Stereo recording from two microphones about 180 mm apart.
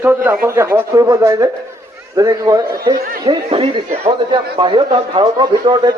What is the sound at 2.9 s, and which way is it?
Speech, 55° right (ahead or behind).